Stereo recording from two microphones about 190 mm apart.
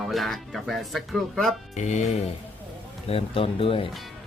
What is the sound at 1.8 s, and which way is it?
Speech, 40° left (ahead or behind).